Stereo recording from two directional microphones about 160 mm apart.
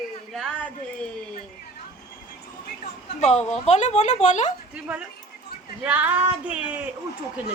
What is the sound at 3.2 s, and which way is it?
A woman's voice, 45° left (ahead or behind).